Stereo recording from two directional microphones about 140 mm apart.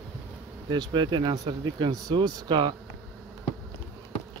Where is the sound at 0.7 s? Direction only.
30° right (ahead or behind).